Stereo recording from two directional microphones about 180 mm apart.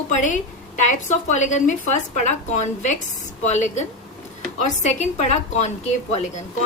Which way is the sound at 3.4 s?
40° left (ahead or behind).